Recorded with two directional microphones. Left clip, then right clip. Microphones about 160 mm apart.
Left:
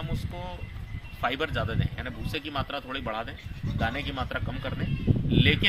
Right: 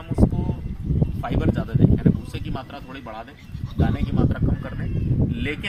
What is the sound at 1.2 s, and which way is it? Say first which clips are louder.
Speech: even; 10° left (ahead or behind).